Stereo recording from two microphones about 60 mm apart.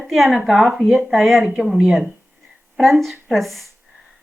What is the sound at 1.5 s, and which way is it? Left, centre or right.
Speech, centre.